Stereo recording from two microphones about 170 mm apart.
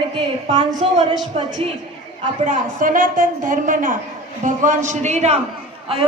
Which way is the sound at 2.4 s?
50° right (ahead or behind).